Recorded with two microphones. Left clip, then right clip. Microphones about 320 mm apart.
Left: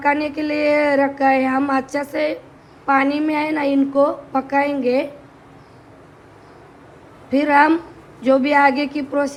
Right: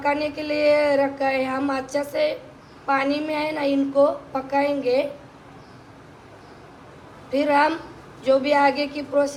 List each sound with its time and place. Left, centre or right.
0.0 s a woman's voice: left
7.3 s a woman's voice: left